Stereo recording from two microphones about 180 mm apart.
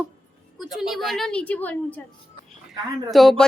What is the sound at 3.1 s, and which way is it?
Speech, centre (ahead or behind).